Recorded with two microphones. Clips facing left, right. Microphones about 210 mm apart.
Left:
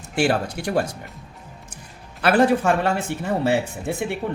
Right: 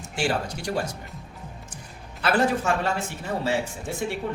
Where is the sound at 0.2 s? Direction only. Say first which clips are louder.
Left 6 dB; 60° left (ahead or behind).